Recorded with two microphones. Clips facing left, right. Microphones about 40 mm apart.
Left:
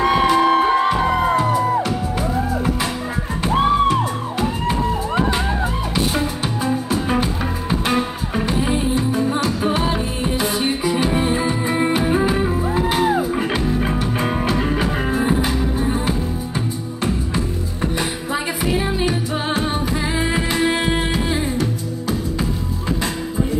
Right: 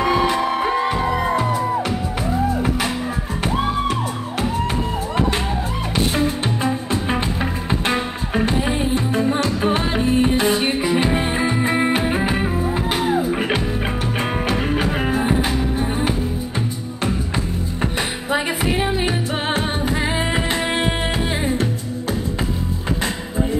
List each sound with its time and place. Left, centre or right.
0.0 s music: left
4.4 s music: right
6.9 s music: centre
9.9 s music: right
15.0 s music: right
18.7 s music: right
21.3 s music: right